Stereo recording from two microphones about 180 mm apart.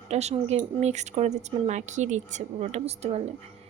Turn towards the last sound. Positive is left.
turn(degrees=-35)  # may be behind; listen again after turning